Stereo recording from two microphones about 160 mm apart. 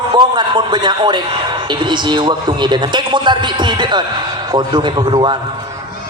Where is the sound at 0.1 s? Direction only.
30° right (ahead or behind).